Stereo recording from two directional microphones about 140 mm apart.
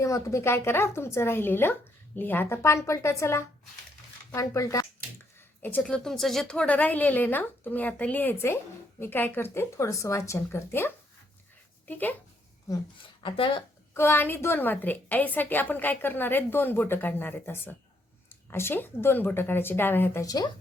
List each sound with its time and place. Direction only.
0.0 s a woman's voice: 20° left (ahead or behind)
5.6 s a woman's voice: 10° left (ahead or behind)
13.2 s speech: 40° left (ahead or behind)
13.9 s a woman's voice: 15° left (ahead or behind)
20.2 s speech: 25° left (ahead or behind)